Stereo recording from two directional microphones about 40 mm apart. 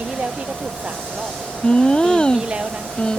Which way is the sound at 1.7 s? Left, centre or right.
Centre.